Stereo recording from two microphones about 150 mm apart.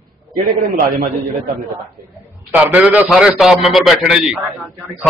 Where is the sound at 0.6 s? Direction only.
75° right (ahead or behind).